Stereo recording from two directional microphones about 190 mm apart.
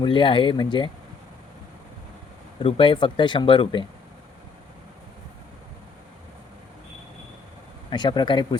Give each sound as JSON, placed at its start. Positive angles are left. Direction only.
{"t": 0.0, "sound": "speech", "side_deg": 25}
{"t": 2.6, "sound": "speech", "side_deg": 25}
{"t": 7.9, "sound": "speech", "side_deg": 25}